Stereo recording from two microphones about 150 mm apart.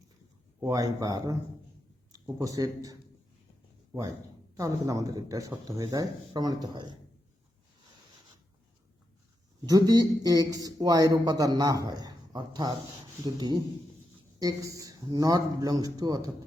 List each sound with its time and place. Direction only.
0.6 s a man's voice: 25° right (ahead or behind)
4.5 s a man's voice: 20° right (ahead or behind)
9.6 s a man's voice: 25° right (ahead or behind)